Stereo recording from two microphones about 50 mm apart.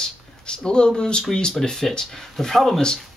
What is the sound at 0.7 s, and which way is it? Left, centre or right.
Speech, centre.